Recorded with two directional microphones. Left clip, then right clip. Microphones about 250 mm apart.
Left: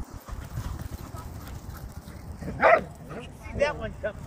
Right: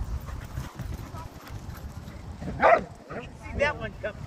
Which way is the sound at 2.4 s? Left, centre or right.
Right.